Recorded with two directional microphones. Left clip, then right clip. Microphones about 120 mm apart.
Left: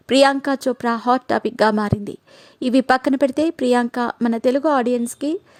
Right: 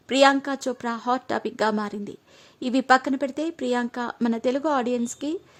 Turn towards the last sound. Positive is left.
turn(degrees=30)  # may be behind; listen again after turning